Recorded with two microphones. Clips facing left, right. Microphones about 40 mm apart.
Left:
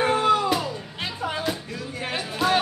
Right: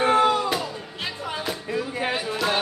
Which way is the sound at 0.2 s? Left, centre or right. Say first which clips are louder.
Even; centre.